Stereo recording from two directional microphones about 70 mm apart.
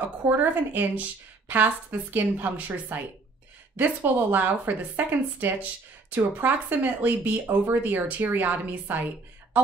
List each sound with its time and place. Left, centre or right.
0.2 s a woman's voice: right